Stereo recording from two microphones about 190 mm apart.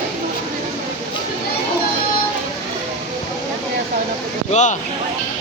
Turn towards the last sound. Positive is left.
turn(degrees=40)  # may be behind; listen again after turning